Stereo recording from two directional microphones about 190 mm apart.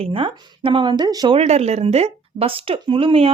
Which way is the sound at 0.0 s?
30° right (ahead or behind).